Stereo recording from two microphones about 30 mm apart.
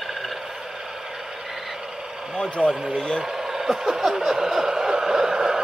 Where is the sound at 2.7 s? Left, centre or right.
Centre.